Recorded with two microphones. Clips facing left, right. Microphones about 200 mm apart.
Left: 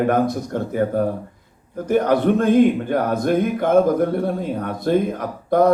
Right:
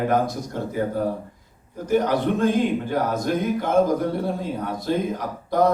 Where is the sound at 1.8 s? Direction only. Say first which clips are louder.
Left 4 dB; 55° left (ahead or behind).